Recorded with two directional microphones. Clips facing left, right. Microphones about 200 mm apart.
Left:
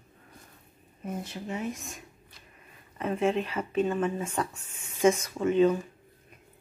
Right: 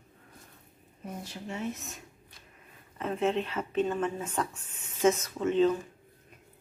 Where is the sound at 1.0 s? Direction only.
20° left (ahead or behind).